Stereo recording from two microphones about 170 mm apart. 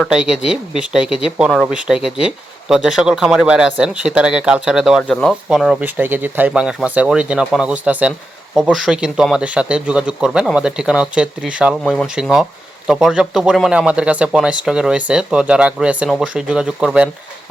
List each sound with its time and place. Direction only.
0.0 s speech: 5° right (ahead or behind)